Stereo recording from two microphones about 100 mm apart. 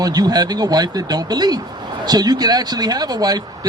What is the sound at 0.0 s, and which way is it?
Speech, 40° right (ahead or behind).